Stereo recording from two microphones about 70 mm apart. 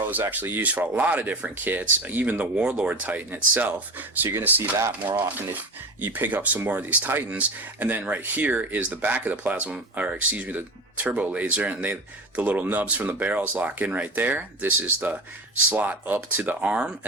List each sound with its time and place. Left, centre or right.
0.1 s speech: right